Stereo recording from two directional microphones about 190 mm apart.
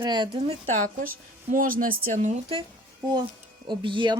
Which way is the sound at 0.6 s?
45° right (ahead or behind).